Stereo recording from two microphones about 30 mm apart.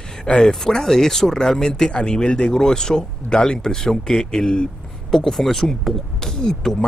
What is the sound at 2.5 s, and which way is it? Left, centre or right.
Speech, centre.